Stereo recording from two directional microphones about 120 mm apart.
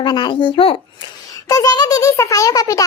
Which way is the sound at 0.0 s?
40° left (ahead or behind).